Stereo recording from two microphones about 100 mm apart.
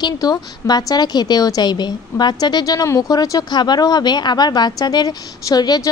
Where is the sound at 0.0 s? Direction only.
40° left (ahead or behind).